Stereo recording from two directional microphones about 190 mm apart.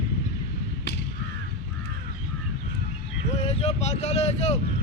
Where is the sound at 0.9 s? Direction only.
60° left (ahead or behind).